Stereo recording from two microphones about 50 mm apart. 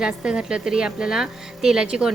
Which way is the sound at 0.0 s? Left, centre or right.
Centre.